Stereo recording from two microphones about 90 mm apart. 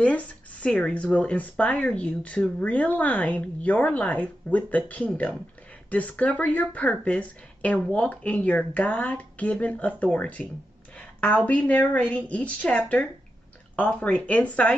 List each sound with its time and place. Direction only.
0.0 s speech: 15° left (ahead or behind)